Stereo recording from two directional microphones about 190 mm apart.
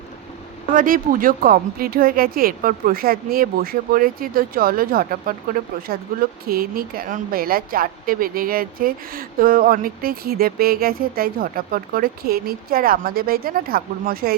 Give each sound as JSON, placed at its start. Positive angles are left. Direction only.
{"t": 0.7, "sound": "speech", "side_deg": -45}